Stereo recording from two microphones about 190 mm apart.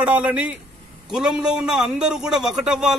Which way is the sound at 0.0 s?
5° right (ahead or behind).